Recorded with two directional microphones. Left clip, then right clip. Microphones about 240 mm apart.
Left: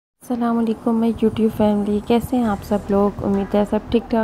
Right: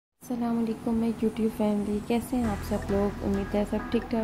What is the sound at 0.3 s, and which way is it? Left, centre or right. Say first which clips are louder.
A woman's voice: left 9 dB; centre.